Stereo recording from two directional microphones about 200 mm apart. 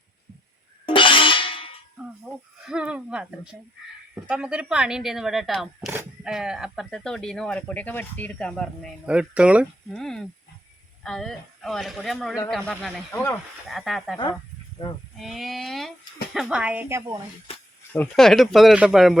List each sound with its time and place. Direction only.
0.9 s music: 25° left (ahead or behind)
2.0 s speech: 5° right (ahead or behind)
15.2 s speech: centre (ahead or behind)
17.9 s speech: 5° left (ahead or behind)